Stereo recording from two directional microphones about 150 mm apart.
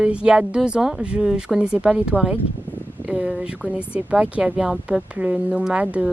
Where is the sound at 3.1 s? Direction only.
5° right (ahead or behind).